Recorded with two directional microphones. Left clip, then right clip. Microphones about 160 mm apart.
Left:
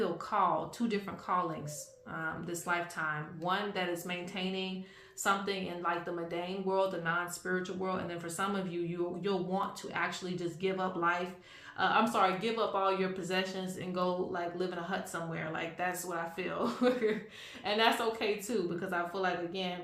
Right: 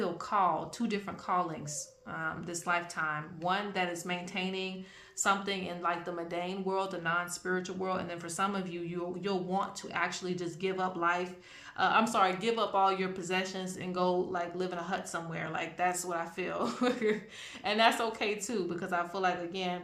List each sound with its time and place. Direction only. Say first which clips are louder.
0.0 s speech: right 1 dB; 35° right (ahead or behind)